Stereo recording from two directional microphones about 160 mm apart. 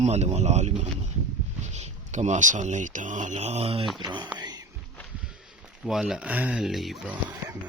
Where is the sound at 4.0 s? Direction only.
25° right (ahead or behind).